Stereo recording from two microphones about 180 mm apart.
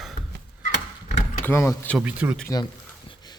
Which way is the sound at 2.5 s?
20° left (ahead or behind).